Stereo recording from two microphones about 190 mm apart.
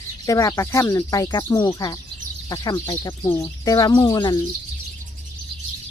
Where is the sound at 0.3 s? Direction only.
15° left (ahead or behind).